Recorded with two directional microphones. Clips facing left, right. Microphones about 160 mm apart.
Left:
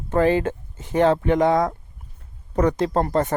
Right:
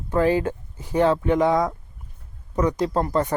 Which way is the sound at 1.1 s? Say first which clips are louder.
Left 1 dB; 55° left (ahead or behind).